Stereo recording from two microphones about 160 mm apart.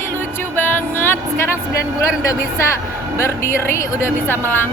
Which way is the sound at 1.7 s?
20° left (ahead or behind).